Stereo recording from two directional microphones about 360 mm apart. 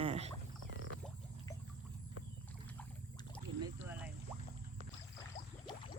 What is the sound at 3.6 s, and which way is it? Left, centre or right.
Boat, centre.